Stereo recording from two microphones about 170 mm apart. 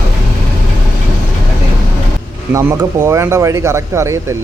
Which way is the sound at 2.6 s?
15° right (ahead or behind).